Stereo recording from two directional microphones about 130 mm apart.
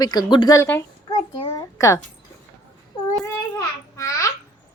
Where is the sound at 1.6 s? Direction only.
25° left (ahead or behind).